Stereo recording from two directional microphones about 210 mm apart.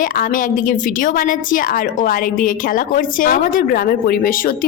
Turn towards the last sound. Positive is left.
turn(degrees=45)  # may be behind; listen again after turning